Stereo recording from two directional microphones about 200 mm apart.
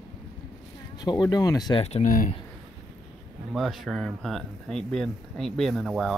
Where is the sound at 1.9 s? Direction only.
40° left (ahead or behind).